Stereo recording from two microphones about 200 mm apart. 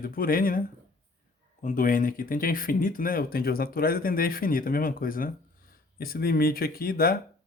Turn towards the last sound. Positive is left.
turn(degrees=50)  # may be behind; listen again after turning